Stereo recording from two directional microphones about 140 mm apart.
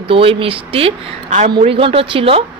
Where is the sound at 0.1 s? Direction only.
40° right (ahead or behind).